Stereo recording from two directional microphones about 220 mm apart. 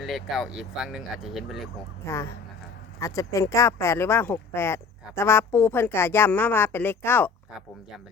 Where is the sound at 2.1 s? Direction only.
10° left (ahead or behind).